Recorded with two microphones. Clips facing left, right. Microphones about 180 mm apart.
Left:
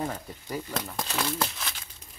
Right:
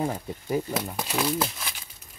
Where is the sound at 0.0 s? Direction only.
20° right (ahead or behind).